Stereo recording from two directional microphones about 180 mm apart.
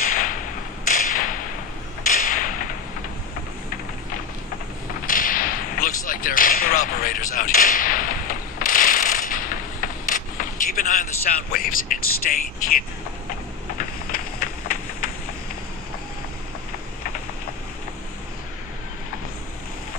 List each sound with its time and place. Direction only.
0.0 s whip: 50° left (ahead or behind)
0.8 s thump: 50° left (ahead or behind)
2.0 s a sound: 50° left (ahead or behind)
5.0 s whip: 50° left (ahead or behind)
11.5 s speech: 55° left (ahead or behind)
13.7 s a sound: 50° left (ahead or behind)